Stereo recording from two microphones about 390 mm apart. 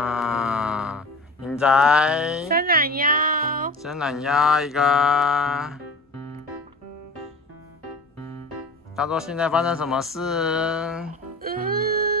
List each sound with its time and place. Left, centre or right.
0.0 s music: centre
2.4 s music: right
3.8 s speech: centre
8.9 s speech: centre
11.4 s music: right